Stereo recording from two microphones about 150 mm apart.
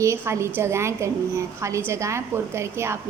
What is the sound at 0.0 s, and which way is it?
A woman's voice, 20° right (ahead or behind).